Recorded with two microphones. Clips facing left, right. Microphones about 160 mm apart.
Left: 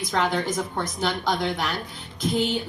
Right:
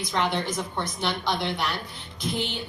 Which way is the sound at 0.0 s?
45° left (ahead or behind).